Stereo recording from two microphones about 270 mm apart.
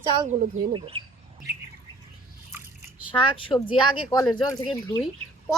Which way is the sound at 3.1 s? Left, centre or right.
Centre.